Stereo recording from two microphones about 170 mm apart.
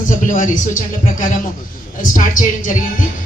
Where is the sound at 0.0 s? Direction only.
50° left (ahead or behind).